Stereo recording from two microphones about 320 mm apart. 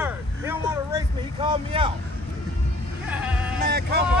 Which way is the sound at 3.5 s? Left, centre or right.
Right.